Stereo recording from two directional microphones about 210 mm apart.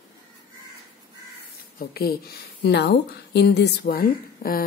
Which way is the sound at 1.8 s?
45° left (ahead or behind).